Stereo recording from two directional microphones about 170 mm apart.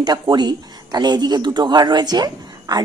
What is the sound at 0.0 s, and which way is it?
Speech, 25° right (ahead or behind).